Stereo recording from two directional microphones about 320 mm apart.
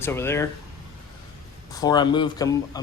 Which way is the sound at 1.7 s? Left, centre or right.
Centre.